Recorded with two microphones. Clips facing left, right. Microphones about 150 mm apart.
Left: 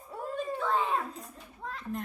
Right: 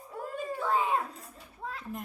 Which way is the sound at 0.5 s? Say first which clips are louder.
Right 2 dB; 5° right (ahead or behind).